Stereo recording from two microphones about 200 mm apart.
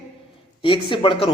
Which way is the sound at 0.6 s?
25° left (ahead or behind).